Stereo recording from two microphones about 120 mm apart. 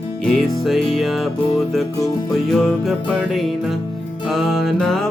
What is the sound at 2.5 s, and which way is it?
Music, centre (ahead or behind).